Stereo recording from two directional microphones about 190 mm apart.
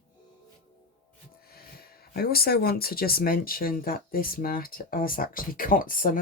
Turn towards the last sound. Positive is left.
turn(degrees=45)  # may be behind; listen again after turning